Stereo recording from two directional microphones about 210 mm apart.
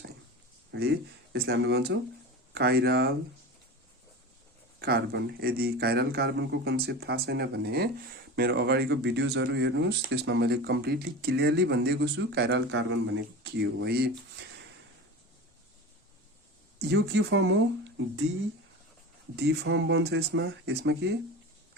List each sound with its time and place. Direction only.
0.7 s speech: 55° right (ahead or behind)
4.8 s speech: 50° right (ahead or behind)
16.8 s speech: 55° right (ahead or behind)
19.4 s speech: 55° right (ahead or behind)